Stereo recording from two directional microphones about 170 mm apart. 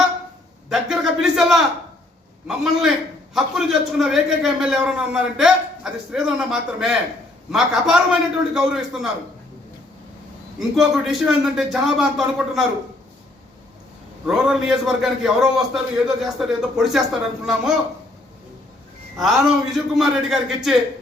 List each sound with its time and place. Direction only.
0.7 s a sound: 5° right (ahead or behind)
2.5 s a man's voice: centre (ahead or behind)
10.6 s a man's voice: centre (ahead or behind)
14.3 s a man's voice: 5° right (ahead or behind)
19.1 s a man's voice: centre (ahead or behind)